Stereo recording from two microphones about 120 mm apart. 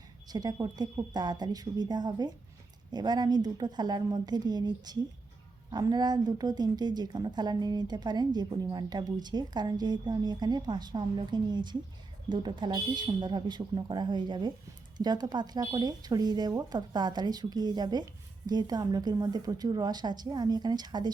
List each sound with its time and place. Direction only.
0.3 s speech: 35° right (ahead or behind)